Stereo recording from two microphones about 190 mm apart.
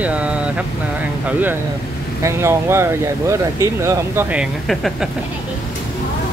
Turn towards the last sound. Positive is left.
turn(degrees=0)  # may be behind; listen again after turning